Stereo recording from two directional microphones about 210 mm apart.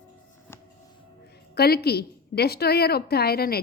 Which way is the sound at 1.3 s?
50° left (ahead or behind).